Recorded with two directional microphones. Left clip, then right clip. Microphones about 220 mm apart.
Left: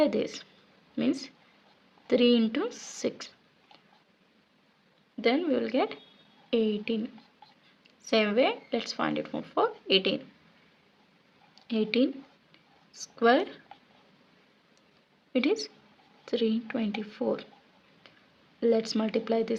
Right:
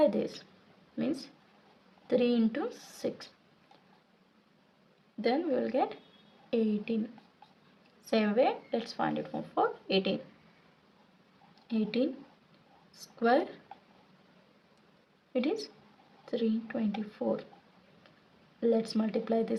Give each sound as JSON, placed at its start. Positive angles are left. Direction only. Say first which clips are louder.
{"t": 0.0, "sound": "speech", "louder": "left 1 dB", "side_deg": 35}
{"t": 5.2, "sound": "speech", "louder": "left 3 dB", "side_deg": 35}
{"t": 8.0, "sound": "speech", "louder": "left 3 dB", "side_deg": 35}
{"t": 11.7, "sound": "speech", "louder": "left 5 dB", "side_deg": 35}
{"t": 15.3, "sound": "a woman's voice", "louder": "left 4 dB", "side_deg": 35}
{"t": 18.6, "sound": "speech", "louder": "left 3 dB", "side_deg": 35}